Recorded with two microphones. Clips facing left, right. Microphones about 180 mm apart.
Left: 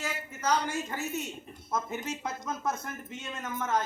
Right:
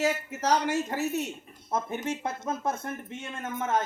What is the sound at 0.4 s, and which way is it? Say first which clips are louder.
Speech: right 4 dB; 70° right (ahead or behind).